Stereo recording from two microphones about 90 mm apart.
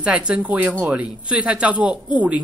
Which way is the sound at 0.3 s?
15° right (ahead or behind).